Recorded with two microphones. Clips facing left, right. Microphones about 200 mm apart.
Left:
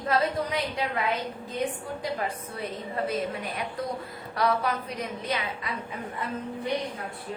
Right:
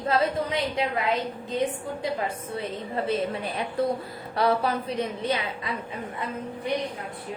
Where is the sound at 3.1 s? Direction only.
30° right (ahead or behind).